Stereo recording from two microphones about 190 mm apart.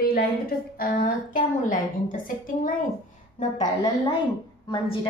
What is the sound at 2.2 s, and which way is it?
Speech, 45° left (ahead or behind).